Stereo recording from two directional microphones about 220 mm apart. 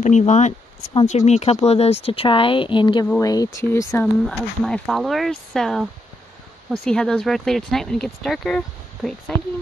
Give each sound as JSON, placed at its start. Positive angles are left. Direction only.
{"t": 0.0, "sound": "speech", "side_deg": 35}